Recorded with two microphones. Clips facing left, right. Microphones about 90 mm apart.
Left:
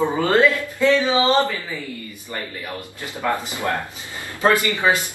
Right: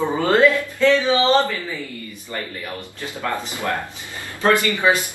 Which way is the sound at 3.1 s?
20° left (ahead or behind).